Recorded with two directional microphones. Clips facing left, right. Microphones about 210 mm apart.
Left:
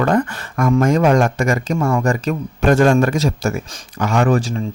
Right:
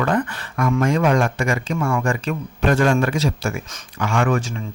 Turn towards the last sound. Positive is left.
turn(degrees=40)  # may be behind; listen again after turning